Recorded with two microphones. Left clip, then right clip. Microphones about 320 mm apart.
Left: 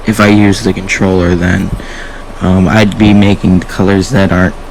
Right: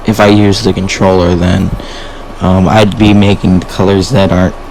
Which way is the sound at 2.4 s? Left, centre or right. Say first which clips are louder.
Right 2 dB; left.